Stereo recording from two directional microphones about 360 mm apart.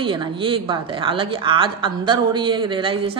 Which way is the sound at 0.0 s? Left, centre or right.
Centre.